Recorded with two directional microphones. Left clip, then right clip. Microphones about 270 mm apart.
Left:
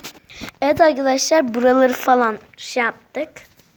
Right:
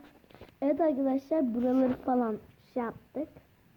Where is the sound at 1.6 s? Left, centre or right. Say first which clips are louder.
Left 17 dB; left.